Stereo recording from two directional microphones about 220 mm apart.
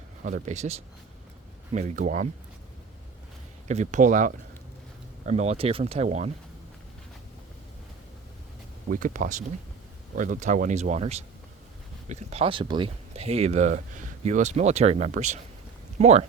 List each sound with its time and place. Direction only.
0.3 s speech: 35° right (ahead or behind)
3.7 s speech: 35° right (ahead or behind)
8.9 s speech: 35° right (ahead or behind)